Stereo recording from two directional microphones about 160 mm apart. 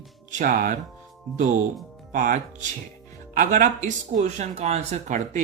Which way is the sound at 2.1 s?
55° right (ahead or behind).